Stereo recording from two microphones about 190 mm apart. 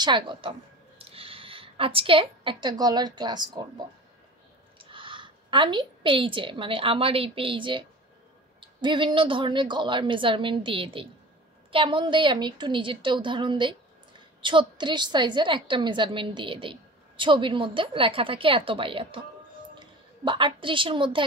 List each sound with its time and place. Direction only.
0.0 s speech: 25° right (ahead or behind)
4.7 s a woman's voice: 25° right (ahead or behind)